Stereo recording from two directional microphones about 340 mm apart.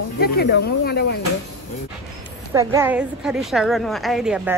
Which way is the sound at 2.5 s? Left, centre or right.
Centre.